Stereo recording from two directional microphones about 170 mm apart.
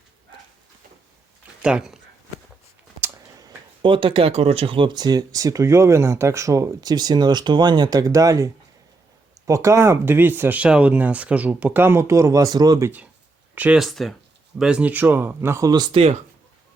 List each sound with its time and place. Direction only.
1.6 s speech: 5° right (ahead or behind)
3.0 s speech: 20° right (ahead or behind)
9.5 s speech: 15° right (ahead or behind)
13.6 s speech: 5° right (ahead or behind); by 16.1 s 35° right (ahead or behind)